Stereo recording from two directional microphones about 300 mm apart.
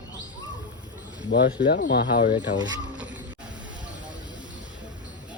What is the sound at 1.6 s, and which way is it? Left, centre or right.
Speech, left.